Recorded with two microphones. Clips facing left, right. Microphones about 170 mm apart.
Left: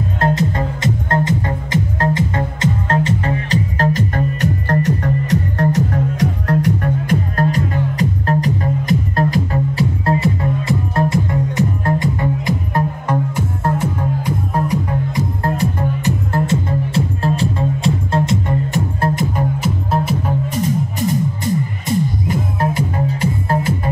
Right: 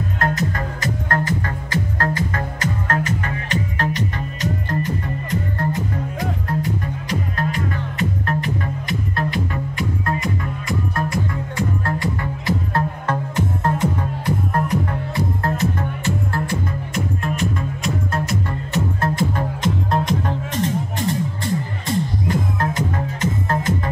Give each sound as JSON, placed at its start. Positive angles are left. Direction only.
{"t": 0.2, "sound": "music", "side_deg": 30}
{"t": 4.4, "sound": "music", "side_deg": 70}
{"t": 7.1, "sound": "music", "side_deg": 40}
{"t": 19.3, "sound": "music", "side_deg": 5}